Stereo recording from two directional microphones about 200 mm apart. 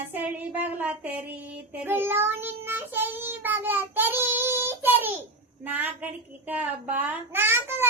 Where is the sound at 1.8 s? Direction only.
10° right (ahead or behind).